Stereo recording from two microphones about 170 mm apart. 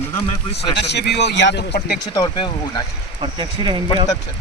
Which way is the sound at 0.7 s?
75° left (ahead or behind).